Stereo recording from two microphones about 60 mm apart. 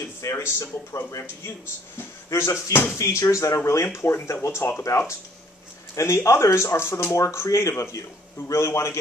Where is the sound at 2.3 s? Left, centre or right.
Left.